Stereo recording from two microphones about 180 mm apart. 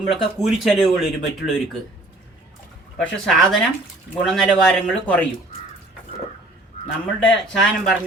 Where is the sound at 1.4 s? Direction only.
65° left (ahead or behind).